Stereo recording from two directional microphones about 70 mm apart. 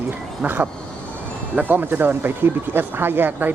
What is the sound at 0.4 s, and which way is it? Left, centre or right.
Speech, right.